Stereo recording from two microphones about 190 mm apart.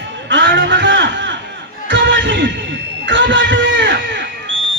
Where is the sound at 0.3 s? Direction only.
75° right (ahead or behind).